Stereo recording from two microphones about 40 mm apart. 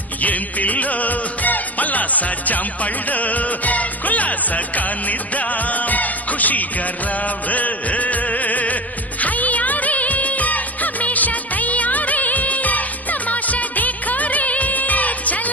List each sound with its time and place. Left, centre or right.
0.2 s music: left
9.2 s music of bollywood: left